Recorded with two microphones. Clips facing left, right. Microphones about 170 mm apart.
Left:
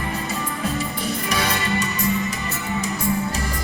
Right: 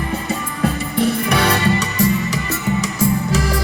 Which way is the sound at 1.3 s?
65° right (ahead or behind).